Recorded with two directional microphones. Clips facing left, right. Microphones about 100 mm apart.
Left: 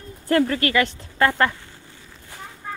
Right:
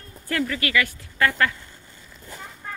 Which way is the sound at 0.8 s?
25° left (ahead or behind).